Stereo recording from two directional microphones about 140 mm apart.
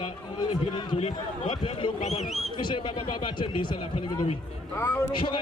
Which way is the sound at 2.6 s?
35° left (ahead or behind).